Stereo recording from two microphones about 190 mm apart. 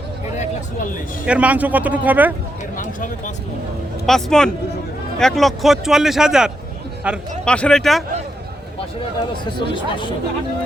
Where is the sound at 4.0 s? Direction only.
Centre (ahead or behind).